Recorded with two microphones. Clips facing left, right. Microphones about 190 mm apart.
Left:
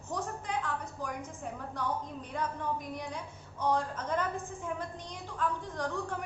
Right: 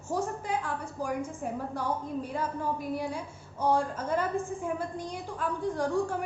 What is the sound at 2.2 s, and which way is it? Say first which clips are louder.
A woman's voice: right 3 dB; 5° right (ahead or behind).